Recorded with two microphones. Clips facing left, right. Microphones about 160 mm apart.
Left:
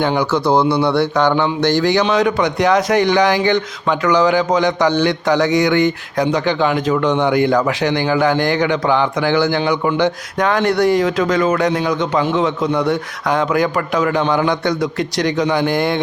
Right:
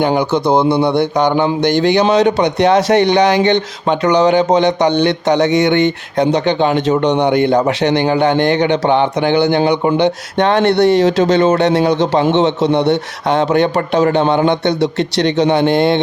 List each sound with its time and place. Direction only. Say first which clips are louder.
0.2 s speech: right 2 dB; 20° right (ahead or behind)
9.6 s a man's voice: right 4 dB; 35° right (ahead or behind)